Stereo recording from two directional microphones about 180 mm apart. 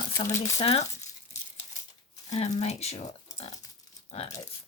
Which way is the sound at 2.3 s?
40° left (ahead or behind).